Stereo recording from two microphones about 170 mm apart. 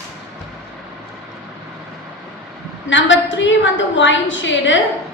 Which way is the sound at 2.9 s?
90° left.